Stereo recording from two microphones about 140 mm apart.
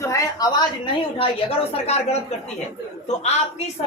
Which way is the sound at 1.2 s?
40° left (ahead or behind).